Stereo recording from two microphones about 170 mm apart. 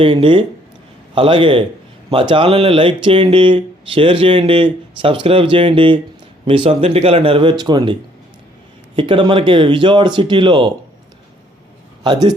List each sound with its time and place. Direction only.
0.0 s speech: 30° right (ahead or behind)
9.0 s speech: 30° right (ahead or behind)
12.0 s speech: 25° right (ahead or behind)